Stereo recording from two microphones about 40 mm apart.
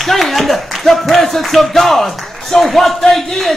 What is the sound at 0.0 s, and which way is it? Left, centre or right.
A man's voice, centre.